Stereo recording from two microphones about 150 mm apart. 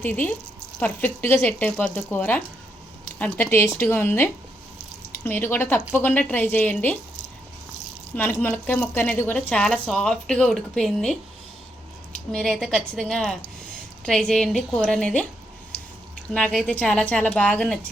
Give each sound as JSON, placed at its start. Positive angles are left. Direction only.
{"t": 0.0, "sound": "a woman's voice", "side_deg": 10}
{"t": 8.1, "sound": "a woman's voice", "side_deg": 10}
{"t": 12.3, "sound": "a woman's voice", "side_deg": 0}
{"t": 16.3, "sound": "a woman's voice", "side_deg": 5}